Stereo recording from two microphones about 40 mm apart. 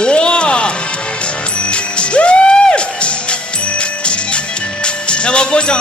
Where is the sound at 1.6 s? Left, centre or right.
Left.